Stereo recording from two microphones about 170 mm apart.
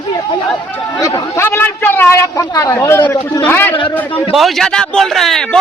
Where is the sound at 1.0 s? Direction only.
20° left (ahead or behind).